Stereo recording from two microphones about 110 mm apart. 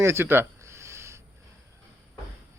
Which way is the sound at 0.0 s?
25° right (ahead or behind).